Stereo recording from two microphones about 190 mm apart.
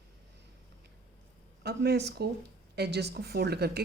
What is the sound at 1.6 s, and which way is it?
Speech, 60° right (ahead or behind).